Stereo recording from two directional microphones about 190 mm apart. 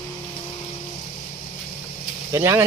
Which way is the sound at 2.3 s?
15° right (ahead or behind).